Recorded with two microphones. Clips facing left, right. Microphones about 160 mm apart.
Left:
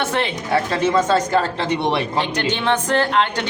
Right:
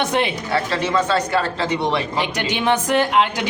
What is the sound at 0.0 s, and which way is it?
Speech, 15° right (ahead or behind).